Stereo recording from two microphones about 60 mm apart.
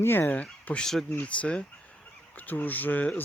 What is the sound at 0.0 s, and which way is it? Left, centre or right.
Speech, left.